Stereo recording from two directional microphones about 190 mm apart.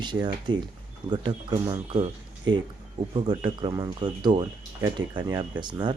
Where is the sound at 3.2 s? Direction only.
25° right (ahead or behind).